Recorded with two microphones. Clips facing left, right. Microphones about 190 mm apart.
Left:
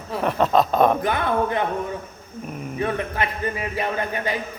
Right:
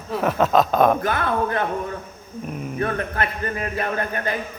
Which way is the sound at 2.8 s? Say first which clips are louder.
Even; 15° left (ahead or behind).